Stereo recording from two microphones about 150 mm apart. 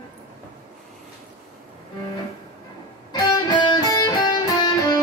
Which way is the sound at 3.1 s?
30° left (ahead or behind).